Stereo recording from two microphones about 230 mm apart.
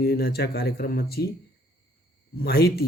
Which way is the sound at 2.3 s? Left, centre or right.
Left.